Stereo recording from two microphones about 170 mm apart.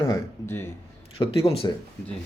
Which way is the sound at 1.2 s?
35° left (ahead or behind).